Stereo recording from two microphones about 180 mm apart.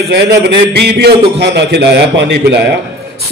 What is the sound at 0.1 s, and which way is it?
A man's voice, 65° right (ahead or behind).